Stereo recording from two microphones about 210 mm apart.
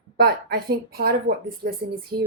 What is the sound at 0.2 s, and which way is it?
A woman's voice, 45° right (ahead or behind).